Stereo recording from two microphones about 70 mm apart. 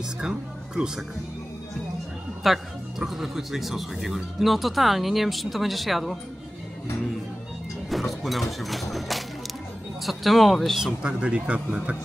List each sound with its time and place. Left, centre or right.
0.2 s speech: centre
2.4 s speech: centre
7.9 s speech: centre
10.9 s speech: centre